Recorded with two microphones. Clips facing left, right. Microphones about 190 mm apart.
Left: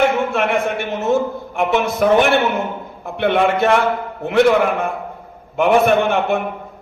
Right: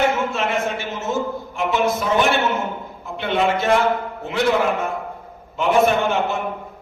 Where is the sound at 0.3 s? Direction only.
60° left (ahead or behind).